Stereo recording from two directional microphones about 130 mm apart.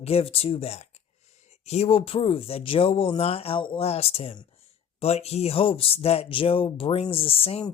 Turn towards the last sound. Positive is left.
turn(degrees=45)  # may be behind; listen again after turning